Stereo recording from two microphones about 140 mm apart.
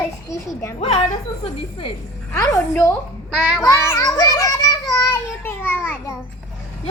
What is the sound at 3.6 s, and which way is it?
Child singing, 20° left (ahead or behind).